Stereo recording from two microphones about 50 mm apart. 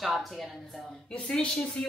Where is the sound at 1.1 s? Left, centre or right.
Left.